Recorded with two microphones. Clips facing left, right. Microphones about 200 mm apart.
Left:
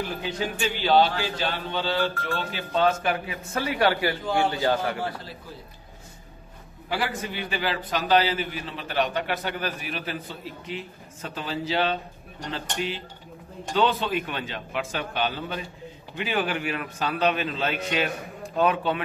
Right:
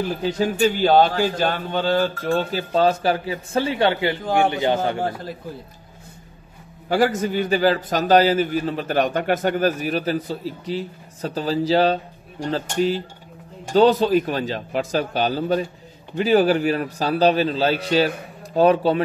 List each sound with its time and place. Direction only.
0.2 s a man's voice: 40° right (ahead or behind); by 5.0 s 25° right (ahead or behind)
6.9 s a man's voice: 45° right (ahead or behind)